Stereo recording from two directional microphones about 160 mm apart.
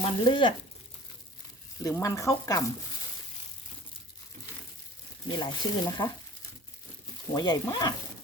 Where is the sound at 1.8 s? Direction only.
20° left (ahead or behind).